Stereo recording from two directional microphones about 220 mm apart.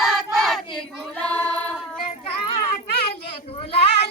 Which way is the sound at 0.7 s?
5° left (ahead or behind).